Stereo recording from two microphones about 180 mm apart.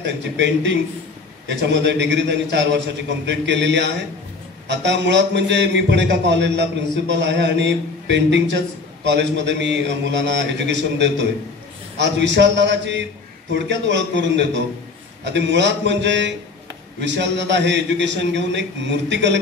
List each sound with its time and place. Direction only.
0.0 s a man's voice: 80° right